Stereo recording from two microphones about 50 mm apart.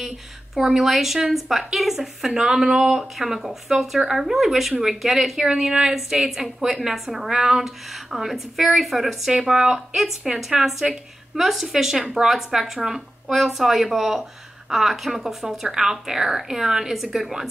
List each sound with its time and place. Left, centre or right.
0.6 s a woman's voice: centre
9.3 s a woman's voice: centre